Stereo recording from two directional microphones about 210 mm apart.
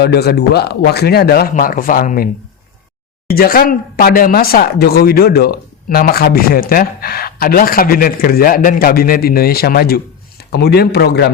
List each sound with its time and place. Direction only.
0.0 s speech: 50° left (ahead or behind)